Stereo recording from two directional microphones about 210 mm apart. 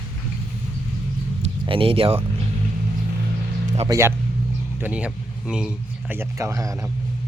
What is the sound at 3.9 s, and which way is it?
A man's voice, 15° right (ahead or behind).